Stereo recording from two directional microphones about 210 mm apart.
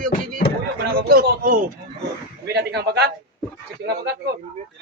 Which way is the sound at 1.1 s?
40° right (ahead or behind).